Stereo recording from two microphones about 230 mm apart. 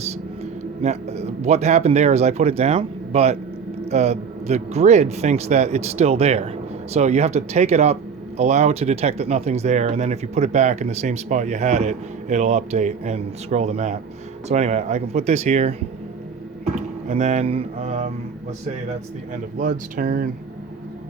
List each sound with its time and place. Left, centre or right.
0.8 s speech: right
16.7 s speech: right
19.3 s speech: right